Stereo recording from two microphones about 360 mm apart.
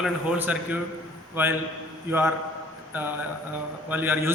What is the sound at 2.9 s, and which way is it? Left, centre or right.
A man's voice, centre.